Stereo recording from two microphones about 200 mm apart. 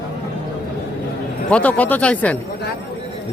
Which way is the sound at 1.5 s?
5° left (ahead or behind).